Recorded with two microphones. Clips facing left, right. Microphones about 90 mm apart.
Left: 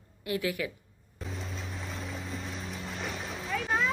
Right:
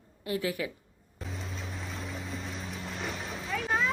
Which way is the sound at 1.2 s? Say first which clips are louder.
Even; centre (ahead or behind).